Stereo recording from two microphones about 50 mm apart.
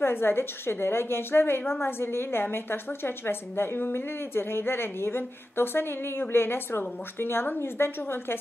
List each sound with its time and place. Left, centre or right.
0.0 s a woman's voice: left